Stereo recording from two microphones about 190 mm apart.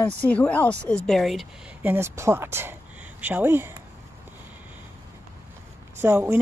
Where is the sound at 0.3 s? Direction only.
10° left (ahead or behind).